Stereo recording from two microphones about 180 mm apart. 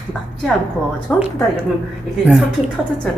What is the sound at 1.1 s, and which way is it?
Speech, 5° left (ahead or behind).